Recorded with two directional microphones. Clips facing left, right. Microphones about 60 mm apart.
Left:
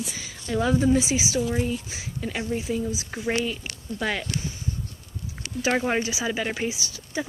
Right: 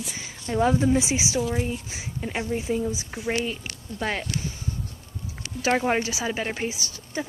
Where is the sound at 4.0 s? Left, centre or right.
Right.